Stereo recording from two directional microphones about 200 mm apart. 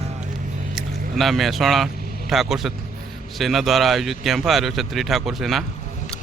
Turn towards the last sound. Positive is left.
turn(degrees=0)  # may be behind; listen again after turning